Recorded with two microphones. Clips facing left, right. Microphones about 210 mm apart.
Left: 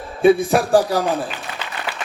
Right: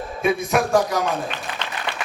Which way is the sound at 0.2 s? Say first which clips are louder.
Left 6 dB; 30° left (ahead or behind).